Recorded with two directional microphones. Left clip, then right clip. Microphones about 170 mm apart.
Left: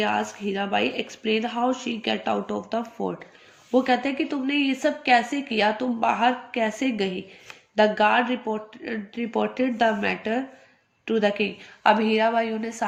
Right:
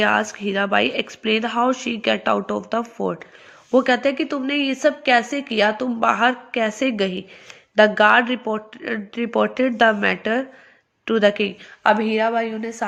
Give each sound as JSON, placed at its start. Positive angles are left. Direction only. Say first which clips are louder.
{"t": 0.0, "sound": "speech", "louder": "right 6 dB", "side_deg": -45}
{"t": 11.8, "sound": "a woman's voice", "louder": "right 2 dB", "side_deg": -25}